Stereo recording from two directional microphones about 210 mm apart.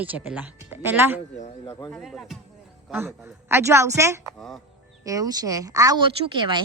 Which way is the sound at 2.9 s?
10° right (ahead or behind).